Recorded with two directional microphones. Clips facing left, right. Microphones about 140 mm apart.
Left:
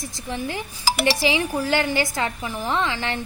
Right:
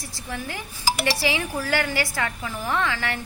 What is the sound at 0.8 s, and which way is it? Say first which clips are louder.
Speech: left 2 dB; 90° left.